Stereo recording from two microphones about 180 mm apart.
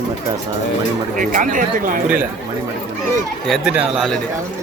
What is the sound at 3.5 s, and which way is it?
Speech, 5° right (ahead or behind).